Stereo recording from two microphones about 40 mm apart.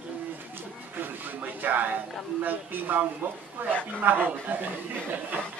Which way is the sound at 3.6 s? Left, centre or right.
Right.